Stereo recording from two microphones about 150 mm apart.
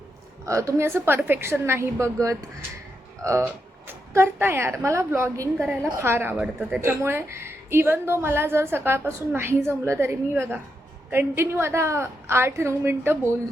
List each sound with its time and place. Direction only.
0.4 s a woman's voice: 20° right (ahead or behind)
3.2 s a woman's voice: 15° right (ahead or behind)
6.8 s a woman's voice: 15° right (ahead or behind)